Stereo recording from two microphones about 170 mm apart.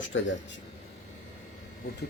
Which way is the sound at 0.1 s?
90° left.